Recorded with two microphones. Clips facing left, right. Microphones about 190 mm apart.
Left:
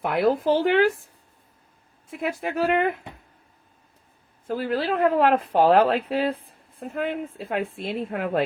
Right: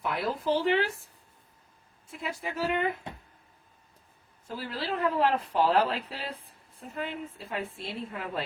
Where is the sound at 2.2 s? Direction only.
60° left (ahead or behind).